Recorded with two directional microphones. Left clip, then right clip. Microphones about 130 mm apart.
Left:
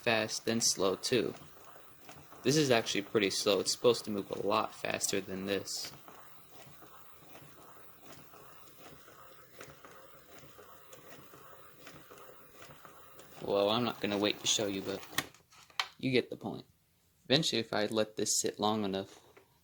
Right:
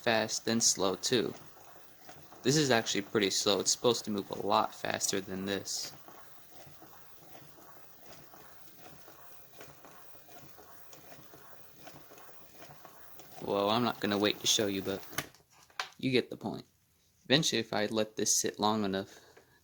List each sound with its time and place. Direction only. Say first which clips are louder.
0.0 s speech: right 1 dB; 30° right (ahead or behind)
2.4 s speech: even; 35° right (ahead or behind)
13.4 s speech: even; 40° right (ahead or behind)
16.0 s speech: right 2 dB; 35° right (ahead or behind)